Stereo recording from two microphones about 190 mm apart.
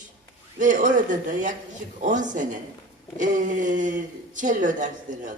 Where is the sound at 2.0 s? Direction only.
40° right (ahead or behind).